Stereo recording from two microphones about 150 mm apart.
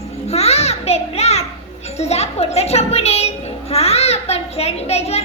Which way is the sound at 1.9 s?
45° left (ahead or behind).